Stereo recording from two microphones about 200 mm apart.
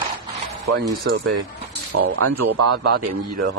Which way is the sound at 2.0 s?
90° right.